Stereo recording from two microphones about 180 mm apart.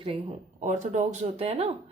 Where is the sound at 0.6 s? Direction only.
40° right (ahead or behind).